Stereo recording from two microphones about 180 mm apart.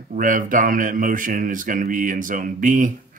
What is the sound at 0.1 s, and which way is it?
Speech, 45° right (ahead or behind).